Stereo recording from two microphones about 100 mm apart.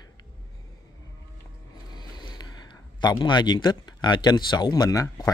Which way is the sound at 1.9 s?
45° left (ahead or behind).